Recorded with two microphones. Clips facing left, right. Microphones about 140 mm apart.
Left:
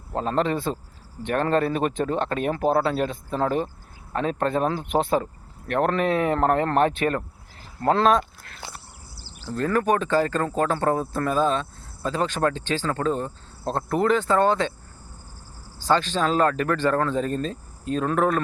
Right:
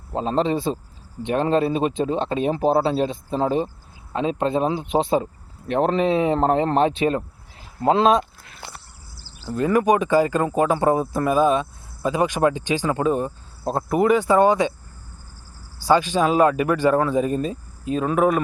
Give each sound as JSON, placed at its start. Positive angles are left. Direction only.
{"t": 0.1, "sound": "speech", "side_deg": -20}
{"t": 9.5, "sound": "speech", "side_deg": -10}
{"t": 15.8, "sound": "speech", "side_deg": -10}